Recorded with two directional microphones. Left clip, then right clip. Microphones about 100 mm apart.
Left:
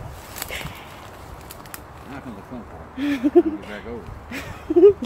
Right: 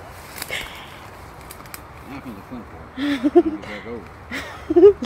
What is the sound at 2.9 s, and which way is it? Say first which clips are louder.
Speech: right 1 dB; 20° left (ahead or behind).